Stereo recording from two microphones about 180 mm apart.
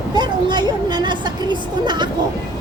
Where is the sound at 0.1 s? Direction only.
25° right (ahead or behind).